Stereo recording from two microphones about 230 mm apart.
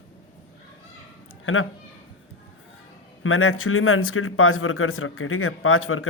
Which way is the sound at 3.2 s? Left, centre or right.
Left.